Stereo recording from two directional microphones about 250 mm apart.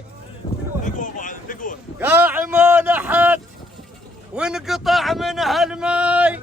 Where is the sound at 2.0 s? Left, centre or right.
Centre.